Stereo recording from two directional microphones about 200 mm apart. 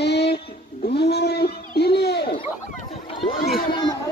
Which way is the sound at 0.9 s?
55° left (ahead or behind).